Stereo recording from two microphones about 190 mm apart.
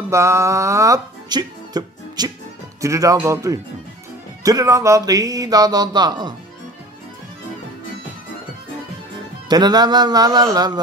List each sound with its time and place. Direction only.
0.1 s speech: 15° right (ahead or behind)
4.4 s music: 20° right (ahead or behind)
9.5 s music: 20° right (ahead or behind)